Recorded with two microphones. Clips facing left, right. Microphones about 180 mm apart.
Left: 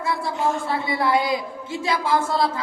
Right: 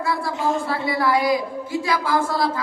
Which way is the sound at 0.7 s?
25° left (ahead or behind).